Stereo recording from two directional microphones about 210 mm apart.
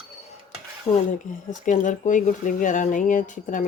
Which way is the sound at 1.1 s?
40° left (ahead or behind).